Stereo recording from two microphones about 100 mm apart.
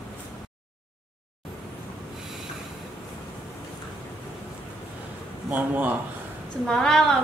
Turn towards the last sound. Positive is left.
turn(degrees=5)  # may be behind; listen again after turning